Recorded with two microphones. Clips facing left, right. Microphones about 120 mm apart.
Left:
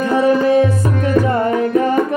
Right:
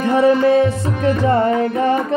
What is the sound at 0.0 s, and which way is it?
Tabla, 30° right (ahead or behind).